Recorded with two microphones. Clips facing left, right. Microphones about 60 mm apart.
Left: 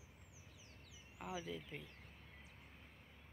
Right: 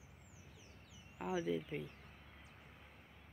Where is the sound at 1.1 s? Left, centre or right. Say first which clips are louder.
Right 8 dB; centre.